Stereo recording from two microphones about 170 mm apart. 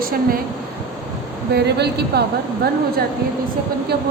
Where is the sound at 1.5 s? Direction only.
70° right (ahead or behind).